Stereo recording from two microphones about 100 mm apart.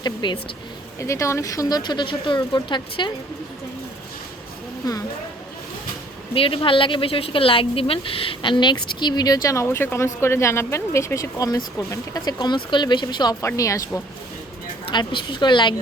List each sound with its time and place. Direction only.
0.0 s speech: 50° left (ahead or behind)
0.9 s speech: 30° left (ahead or behind); by 3.1 s 55° left (ahead or behind)
6.3 s speech: 65° left (ahead or behind); by 13.3 s 45° left (ahead or behind)
13.6 s speech: 35° left (ahead or behind)
14.9 s speech: 50° left (ahead or behind)